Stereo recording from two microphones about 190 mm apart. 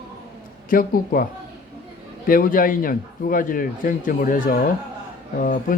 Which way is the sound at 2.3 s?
45° left (ahead or behind).